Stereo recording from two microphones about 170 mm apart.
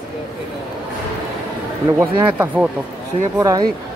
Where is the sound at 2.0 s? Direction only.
10° right (ahead or behind).